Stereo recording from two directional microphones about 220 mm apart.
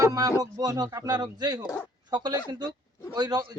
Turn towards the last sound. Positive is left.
turn(degrees=-20)  # may be behind; listen again after turning